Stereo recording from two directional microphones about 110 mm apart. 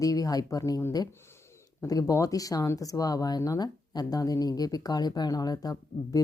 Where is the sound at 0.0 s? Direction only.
30° left (ahead or behind).